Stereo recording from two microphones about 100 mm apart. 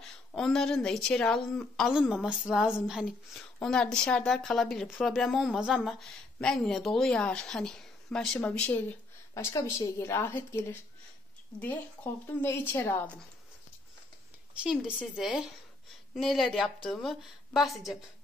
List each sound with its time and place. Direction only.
0.0 s a woman's voice: 5° left (ahead or behind)
2.0 s a woman's voice: 10° right (ahead or behind)
3.6 s a woman's voice: 5° left (ahead or behind); by 5.9 s 10° right (ahead or behind)
5.9 s a woman's voice: 5° left (ahead or behind)
9.6 s a woman's voice: 30° left (ahead or behind)
14.5 s a woman's voice: 10° right (ahead or behind)
16.2 s a woman's voice: centre (ahead or behind)